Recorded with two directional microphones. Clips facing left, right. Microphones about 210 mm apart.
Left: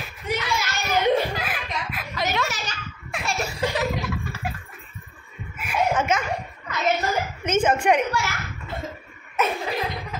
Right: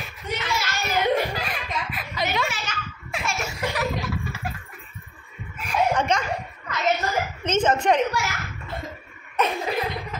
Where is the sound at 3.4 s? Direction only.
30° left (ahead or behind).